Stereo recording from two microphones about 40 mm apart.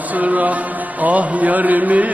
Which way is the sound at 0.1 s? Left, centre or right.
Right.